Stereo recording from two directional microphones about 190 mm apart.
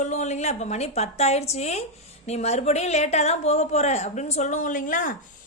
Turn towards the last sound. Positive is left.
turn(degrees=45)  # may be behind; listen again after turning